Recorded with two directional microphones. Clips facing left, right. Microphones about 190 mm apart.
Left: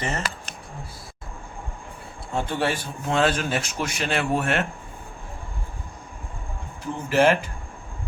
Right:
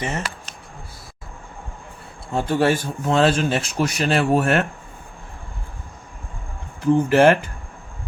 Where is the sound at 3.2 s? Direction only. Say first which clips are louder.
Right 4 dB; 30° right (ahead or behind).